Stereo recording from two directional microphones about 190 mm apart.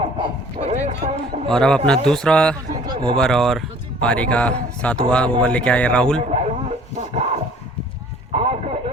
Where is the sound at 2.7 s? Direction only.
20° right (ahead or behind).